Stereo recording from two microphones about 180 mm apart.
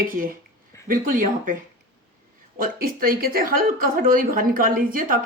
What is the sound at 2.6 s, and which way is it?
Speech, 55° right (ahead or behind).